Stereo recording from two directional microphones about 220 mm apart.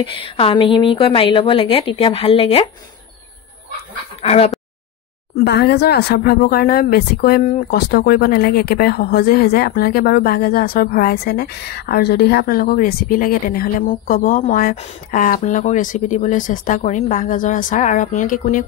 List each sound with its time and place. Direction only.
0.0 s a woman's voice: 25° left (ahead or behind)
4.2 s speech: 25° left (ahead or behind)
5.3 s speech: 45° left (ahead or behind)